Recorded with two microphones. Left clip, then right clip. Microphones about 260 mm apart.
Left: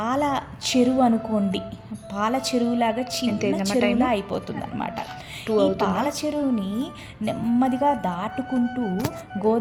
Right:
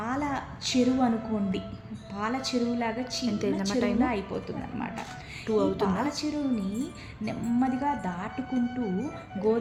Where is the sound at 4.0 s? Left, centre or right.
Left.